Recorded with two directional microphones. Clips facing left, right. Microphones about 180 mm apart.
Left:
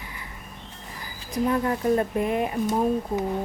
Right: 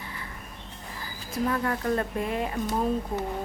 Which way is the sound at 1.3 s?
20° left (ahead or behind).